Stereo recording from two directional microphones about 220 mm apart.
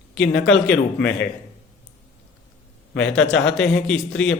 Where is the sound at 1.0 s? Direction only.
50° left (ahead or behind).